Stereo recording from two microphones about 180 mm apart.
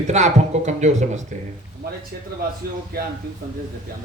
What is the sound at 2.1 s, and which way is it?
Speech, 60° right (ahead or behind).